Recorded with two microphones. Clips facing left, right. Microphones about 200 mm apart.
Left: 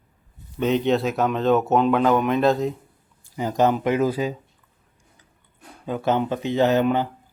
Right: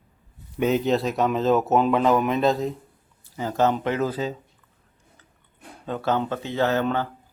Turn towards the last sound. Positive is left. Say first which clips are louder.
# left 4 dB
turn(degrees=15)  # may be behind; listen again after turning